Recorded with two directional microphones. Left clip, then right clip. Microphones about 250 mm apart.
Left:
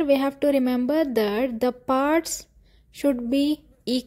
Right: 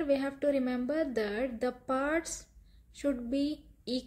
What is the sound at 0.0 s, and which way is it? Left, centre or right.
A woman's voice, left.